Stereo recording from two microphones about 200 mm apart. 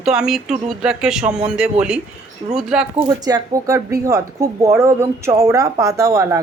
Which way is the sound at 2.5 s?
5° right (ahead or behind).